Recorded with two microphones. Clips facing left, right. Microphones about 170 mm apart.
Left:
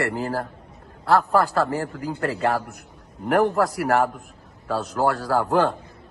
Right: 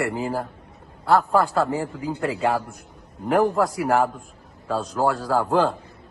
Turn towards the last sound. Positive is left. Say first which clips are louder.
# even
turn(degrees=0)  # may be behind; listen again after turning